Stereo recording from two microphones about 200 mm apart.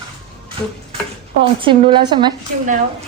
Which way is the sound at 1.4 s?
25° right (ahead or behind).